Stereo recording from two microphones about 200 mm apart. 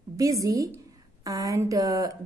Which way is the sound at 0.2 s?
15° right (ahead or behind).